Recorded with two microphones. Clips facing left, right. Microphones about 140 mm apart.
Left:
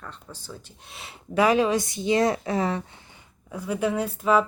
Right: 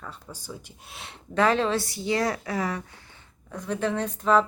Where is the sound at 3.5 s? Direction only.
10° left (ahead or behind).